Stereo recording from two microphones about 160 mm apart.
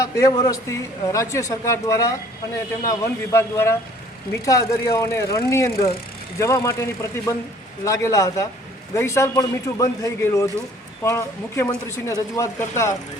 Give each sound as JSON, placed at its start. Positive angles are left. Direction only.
{"t": 0.0, "sound": "a man's voice", "side_deg": 20}